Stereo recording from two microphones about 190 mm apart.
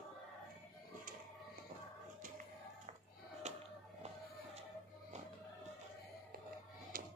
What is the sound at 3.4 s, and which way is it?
Music, 35° right (ahead or behind).